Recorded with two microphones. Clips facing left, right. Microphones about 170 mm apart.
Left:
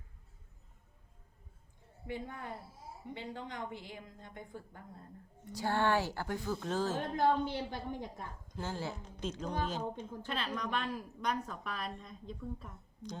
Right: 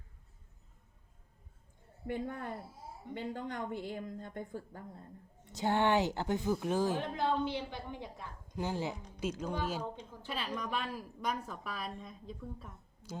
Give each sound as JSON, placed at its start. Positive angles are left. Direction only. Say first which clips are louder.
{"t": 2.0, "sound": "a woman's voice", "louder": "right 4 dB", "side_deg": -50}
{"t": 5.5, "sound": "speech", "louder": "right 2 dB", "side_deg": -20}
{"t": 7.2, "sound": "speech", "louder": "left 6 dB", "side_deg": 45}
{"t": 8.5, "sound": "a woman's voice", "louder": "right 4 dB", "side_deg": -15}